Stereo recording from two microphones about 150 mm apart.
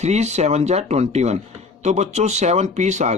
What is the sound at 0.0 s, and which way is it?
Speech, 45° right (ahead or behind).